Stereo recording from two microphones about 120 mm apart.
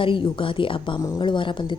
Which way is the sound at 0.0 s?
45° left (ahead or behind).